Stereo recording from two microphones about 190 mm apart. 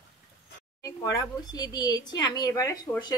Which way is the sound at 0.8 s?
20° left (ahead or behind).